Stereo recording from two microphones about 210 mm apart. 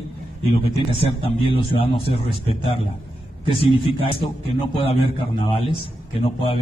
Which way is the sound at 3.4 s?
25° left (ahead or behind).